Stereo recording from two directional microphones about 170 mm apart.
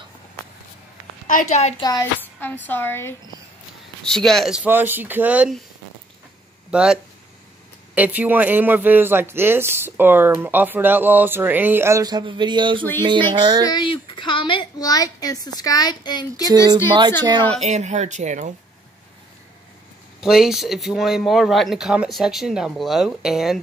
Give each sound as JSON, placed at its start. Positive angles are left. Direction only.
{"t": 1.2, "sound": "a woman's voice", "side_deg": 45}
{"t": 1.8, "sound": "a woman's voice", "side_deg": 20}
{"t": 2.2, "sound": "a woman's voice", "side_deg": 10}
{"t": 4.0, "sound": "a man's voice", "side_deg": 5}
{"t": 6.7, "sound": "a man's voice", "side_deg": -5}
{"t": 13.7, "sound": "a woman's voice", "side_deg": 25}
{"t": 16.4, "sound": "speech", "side_deg": -25}
{"t": 17.6, "sound": "speech", "side_deg": -40}
{"t": 20.2, "sound": "speech", "side_deg": -5}